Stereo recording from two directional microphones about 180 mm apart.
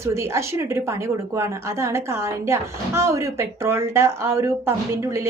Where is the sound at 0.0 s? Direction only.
15° right (ahead or behind).